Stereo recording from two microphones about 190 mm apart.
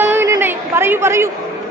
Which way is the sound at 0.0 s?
10° right (ahead or behind).